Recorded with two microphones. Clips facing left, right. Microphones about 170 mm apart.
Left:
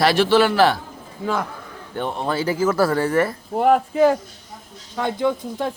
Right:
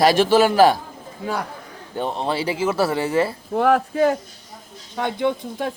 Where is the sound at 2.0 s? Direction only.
30° right (ahead or behind).